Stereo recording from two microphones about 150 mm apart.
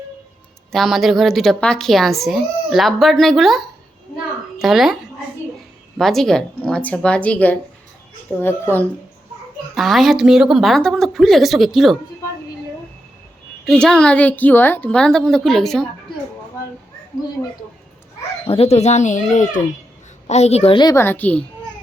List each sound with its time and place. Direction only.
0.7 s a woman's voice: centre (ahead or behind)
6.0 s speech: centre (ahead or behind)
9.7 s a woman's voice: centre (ahead or behind)
13.7 s a woman's voice: 5° left (ahead or behind)
18.4 s speech: 40° left (ahead or behind)
20.7 s speech: 25° left (ahead or behind)
21.0 s speech: 10° left (ahead or behind)